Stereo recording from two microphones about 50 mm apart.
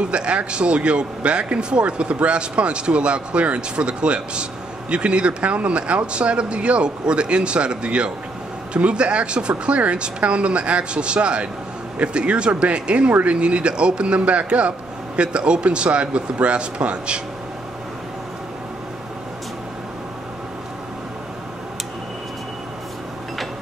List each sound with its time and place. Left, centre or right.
0.1 s speech: right